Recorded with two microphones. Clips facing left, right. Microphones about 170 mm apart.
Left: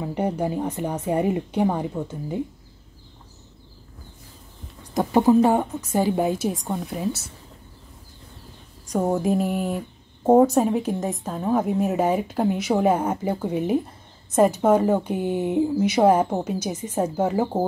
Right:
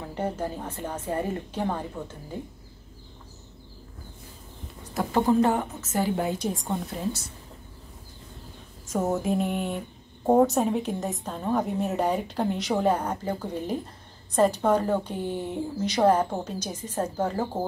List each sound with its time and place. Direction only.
0.0 s speech: 15° left (ahead or behind)
4.9 s speech: 15° left (ahead or behind)
6.6 s a woman's voice: centre (ahead or behind)
8.9 s a woman's voice: centre (ahead or behind)